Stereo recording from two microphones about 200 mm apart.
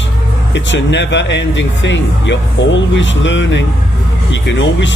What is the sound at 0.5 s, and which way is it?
Speech, 60° left (ahead or behind).